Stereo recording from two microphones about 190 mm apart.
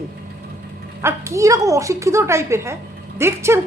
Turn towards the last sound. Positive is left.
turn(degrees=-15)  # may be behind; listen again after turning